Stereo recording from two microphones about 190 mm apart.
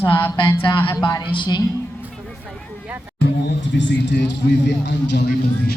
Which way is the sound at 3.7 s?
70° left (ahead or behind).